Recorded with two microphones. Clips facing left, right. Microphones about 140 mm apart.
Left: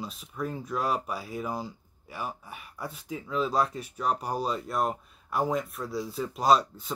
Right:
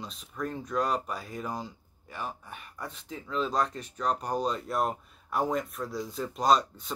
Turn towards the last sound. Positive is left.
turn(degrees=5)  # may be behind; listen again after turning